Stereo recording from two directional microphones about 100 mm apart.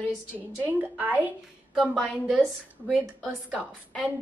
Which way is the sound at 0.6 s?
15° right (ahead or behind).